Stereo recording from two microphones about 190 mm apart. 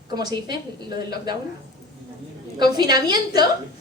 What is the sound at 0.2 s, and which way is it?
A woman's voice, 20° right (ahead or behind).